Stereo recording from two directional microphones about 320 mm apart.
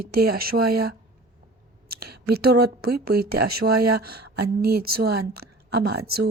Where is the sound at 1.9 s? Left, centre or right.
Right.